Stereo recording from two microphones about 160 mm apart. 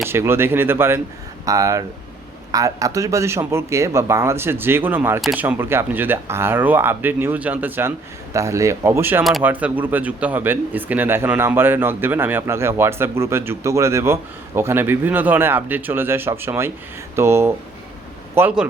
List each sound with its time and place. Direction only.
0.0 s speech: 15° right (ahead or behind)